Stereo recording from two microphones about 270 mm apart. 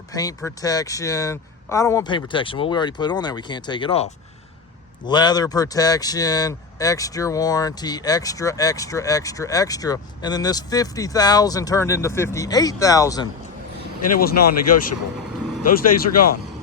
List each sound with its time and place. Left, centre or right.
0.1 s speech: centre
14.0 s speech: left
15.9 s speech: left